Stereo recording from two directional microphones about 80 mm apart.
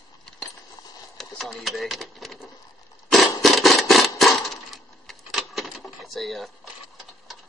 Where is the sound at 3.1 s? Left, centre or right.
Centre.